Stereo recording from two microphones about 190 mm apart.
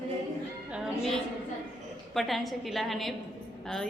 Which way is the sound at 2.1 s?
Centre (ahead or behind).